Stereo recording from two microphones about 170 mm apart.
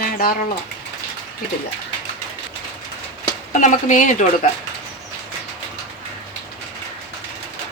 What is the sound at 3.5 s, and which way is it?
Speech, 45° left (ahead or behind).